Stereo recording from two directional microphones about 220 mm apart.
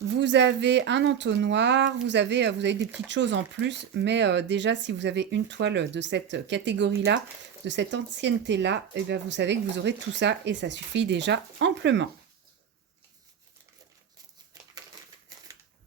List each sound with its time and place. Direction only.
0.1 s speech: 55° right (ahead or behind)